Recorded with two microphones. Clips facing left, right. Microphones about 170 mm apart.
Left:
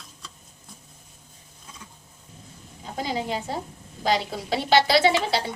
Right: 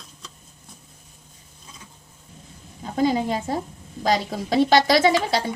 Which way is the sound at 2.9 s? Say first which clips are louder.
Right 7 dB; 50° right (ahead or behind).